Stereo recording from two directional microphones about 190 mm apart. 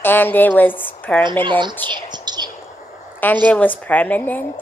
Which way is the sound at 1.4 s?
25° right (ahead or behind).